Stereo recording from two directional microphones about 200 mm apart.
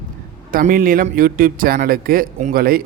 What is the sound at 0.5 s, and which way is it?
A man's voice, 45° right (ahead or behind).